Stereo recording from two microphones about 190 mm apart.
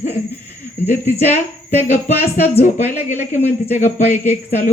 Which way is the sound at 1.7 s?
35° left (ahead or behind).